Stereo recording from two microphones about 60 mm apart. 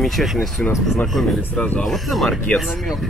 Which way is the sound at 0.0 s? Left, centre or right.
Centre.